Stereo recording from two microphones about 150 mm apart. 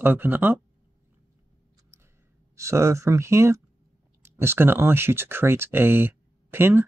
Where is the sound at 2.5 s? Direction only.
20° right (ahead or behind).